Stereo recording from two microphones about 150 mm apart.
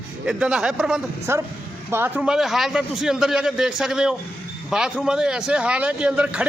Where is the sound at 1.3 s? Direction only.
15° right (ahead or behind).